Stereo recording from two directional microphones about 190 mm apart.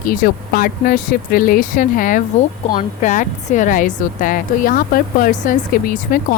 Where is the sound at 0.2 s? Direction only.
50° left (ahead or behind).